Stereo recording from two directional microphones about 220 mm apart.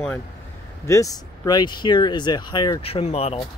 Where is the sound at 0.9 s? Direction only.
15° left (ahead or behind).